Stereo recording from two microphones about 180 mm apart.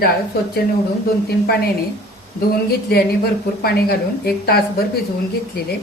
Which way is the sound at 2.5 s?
60° left (ahead or behind).